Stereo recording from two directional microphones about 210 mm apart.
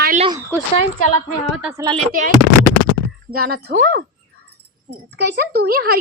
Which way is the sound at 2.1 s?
40° right (ahead or behind).